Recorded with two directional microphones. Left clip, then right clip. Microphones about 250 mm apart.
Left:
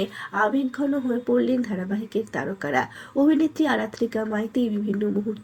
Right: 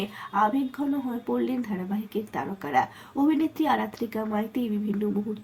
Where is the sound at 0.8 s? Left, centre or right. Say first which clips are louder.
Left 5 dB; centre.